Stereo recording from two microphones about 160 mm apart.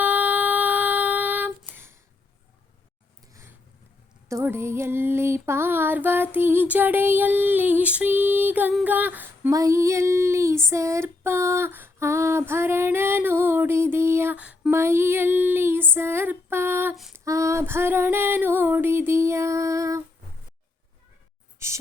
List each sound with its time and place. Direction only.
0.0 s female singing: 10° right (ahead or behind)
4.3 s music: 15° right (ahead or behind)
8.8 s female singing: 10° right (ahead or behind)
16.9 s female singing: centre (ahead or behind)
17.2 s music: 20° right (ahead or behind)